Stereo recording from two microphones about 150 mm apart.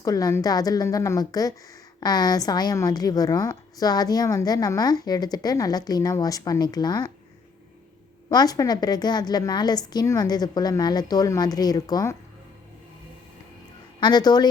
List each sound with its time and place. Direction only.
0.0 s a woman's voice: 25° left (ahead or behind)
8.3 s a woman's voice: 25° left (ahead or behind)
14.0 s a woman's voice: 30° left (ahead or behind)